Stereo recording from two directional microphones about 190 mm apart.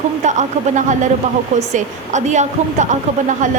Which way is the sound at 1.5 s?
40° right (ahead or behind).